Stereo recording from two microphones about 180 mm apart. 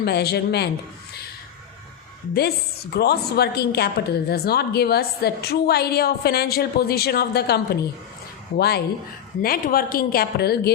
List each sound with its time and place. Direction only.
0.0 s a woman's voice: 65° left (ahead or behind)
2.9 s a woman's voice: 65° left (ahead or behind)